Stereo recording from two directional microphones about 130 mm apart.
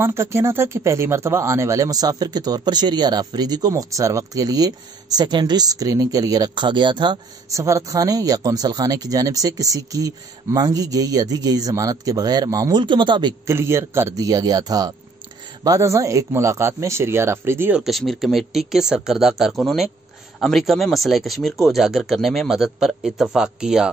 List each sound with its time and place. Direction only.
0.0 s speech: 20° right (ahead or behind); by 13.3 s 35° right (ahead or behind)
13.5 s speech: 20° right (ahead or behind)
17.7 s a man's voice: centre (ahead or behind)